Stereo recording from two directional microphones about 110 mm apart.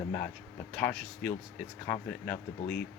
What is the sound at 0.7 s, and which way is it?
Speech, 10° left (ahead or behind).